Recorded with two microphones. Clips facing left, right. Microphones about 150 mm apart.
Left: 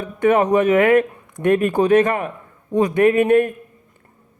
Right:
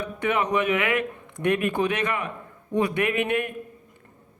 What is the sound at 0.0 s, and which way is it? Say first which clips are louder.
Speech: left 9 dB; 45° left (ahead or behind).